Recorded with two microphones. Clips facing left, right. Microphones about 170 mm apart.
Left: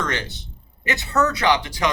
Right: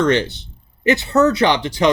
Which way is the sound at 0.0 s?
30° right (ahead or behind).